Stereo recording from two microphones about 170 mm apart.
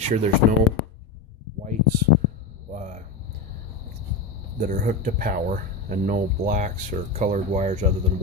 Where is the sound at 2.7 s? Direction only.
45° right (ahead or behind).